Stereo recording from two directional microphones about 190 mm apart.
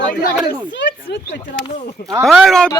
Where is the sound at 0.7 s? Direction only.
70° left (ahead or behind).